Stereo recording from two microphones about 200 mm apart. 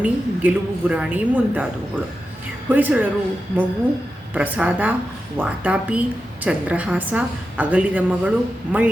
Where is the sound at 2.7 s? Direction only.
10° right (ahead or behind).